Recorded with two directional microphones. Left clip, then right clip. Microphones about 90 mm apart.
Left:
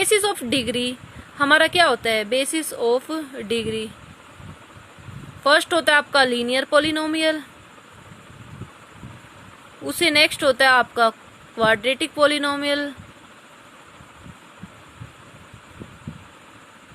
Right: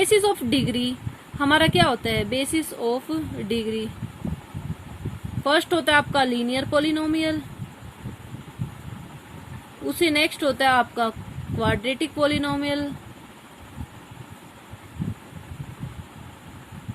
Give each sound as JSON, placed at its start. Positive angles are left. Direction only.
{"t": 0.0, "sound": "speech", "side_deg": 60}
{"t": 5.4, "sound": "speech", "side_deg": 80}
{"t": 9.8, "sound": "speech", "side_deg": 90}